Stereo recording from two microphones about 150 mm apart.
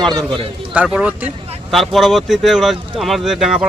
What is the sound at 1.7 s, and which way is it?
Speech, centre (ahead or behind).